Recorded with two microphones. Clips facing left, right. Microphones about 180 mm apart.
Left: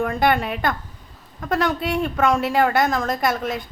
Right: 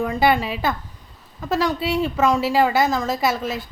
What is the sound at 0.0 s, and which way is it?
A woman's voice, centre (ahead or behind).